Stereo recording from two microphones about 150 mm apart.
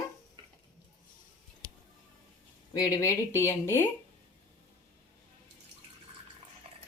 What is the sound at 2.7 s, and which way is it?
Speech, 20° left (ahead or behind).